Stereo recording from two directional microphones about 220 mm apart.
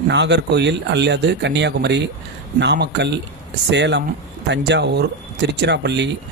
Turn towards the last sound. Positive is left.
turn(degrees=-50)  # may be behind; listen again after turning